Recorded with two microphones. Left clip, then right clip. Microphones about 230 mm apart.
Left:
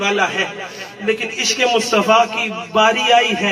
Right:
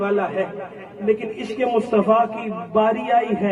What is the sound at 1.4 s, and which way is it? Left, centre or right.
A man's voice, centre.